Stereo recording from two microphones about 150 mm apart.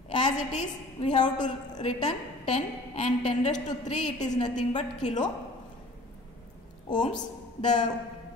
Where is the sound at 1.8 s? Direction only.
50° left (ahead or behind).